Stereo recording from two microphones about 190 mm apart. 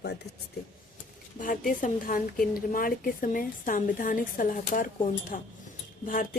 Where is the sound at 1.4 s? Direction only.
45° left (ahead or behind).